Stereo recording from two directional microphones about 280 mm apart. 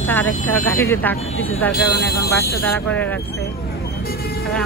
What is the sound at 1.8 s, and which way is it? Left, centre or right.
Speech, left.